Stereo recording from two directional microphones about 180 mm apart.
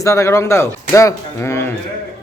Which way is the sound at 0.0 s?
15° left (ahead or behind).